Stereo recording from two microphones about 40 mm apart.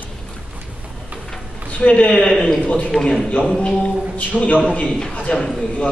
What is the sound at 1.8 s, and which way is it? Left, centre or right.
Speech, left.